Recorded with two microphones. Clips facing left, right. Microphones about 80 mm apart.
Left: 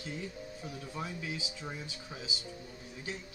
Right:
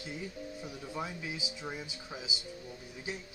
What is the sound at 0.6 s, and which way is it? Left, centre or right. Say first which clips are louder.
Speech: right 1 dB; centre.